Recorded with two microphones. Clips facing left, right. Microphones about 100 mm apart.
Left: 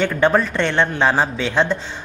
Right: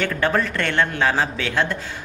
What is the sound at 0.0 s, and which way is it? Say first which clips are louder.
A man's voice: left 4 dB; 15° left (ahead or behind).